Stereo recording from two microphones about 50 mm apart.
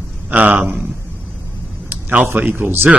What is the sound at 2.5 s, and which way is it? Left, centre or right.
Speech, right.